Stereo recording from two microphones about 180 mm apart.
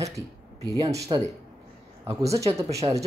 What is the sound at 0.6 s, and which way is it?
Speech, 20° right (ahead or behind).